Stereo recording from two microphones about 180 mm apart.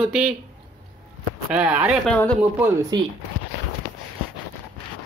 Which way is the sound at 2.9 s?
25° right (ahead or behind).